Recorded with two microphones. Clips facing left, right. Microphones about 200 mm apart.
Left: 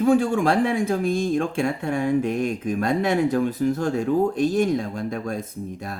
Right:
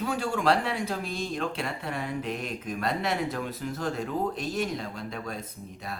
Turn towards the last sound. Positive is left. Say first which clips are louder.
# left 7 dB
turn(degrees=50)  # may be behind; listen again after turning